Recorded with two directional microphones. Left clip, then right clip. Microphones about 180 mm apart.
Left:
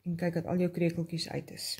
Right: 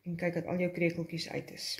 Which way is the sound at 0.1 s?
90° left.